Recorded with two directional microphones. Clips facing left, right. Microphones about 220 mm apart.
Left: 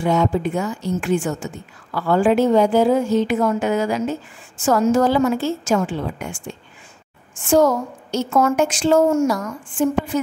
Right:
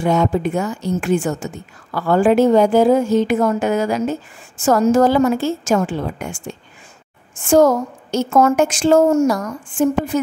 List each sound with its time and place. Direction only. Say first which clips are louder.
0.0 s a woman's voice: right 2 dB; 50° right (ahead or behind)
7.4 s a woman's voice: right 3 dB; 45° right (ahead or behind)